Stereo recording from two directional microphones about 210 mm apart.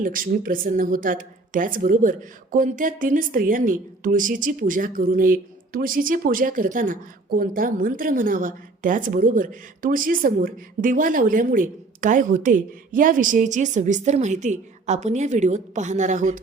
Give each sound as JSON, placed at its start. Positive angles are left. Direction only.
{"t": 0.0, "sound": "speech", "side_deg": -40}